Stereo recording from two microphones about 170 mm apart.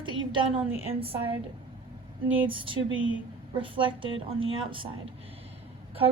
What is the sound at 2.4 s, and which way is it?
A woman's voice, 30° right (ahead or behind).